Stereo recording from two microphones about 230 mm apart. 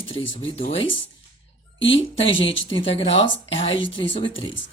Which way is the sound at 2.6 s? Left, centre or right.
Left.